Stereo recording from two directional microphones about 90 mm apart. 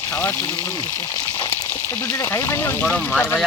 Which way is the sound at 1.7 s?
25° left (ahead or behind).